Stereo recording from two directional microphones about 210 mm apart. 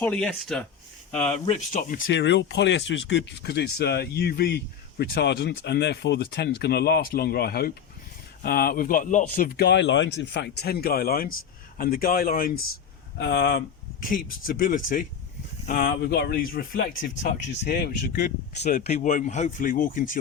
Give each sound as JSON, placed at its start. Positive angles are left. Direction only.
{"t": 0.0, "sound": "speech", "side_deg": 5}
{"t": 1.5, "sound": "speech", "side_deg": 40}
{"t": 18.6, "sound": "speech", "side_deg": 30}